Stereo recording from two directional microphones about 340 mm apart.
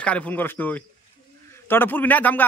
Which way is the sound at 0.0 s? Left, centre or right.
Centre.